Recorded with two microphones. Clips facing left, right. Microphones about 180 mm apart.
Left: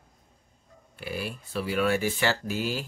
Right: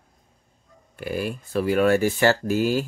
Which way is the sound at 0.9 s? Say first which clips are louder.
Right 7 dB; 45° right (ahead or behind).